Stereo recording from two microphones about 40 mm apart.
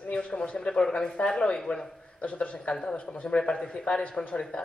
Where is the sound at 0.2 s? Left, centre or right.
Left.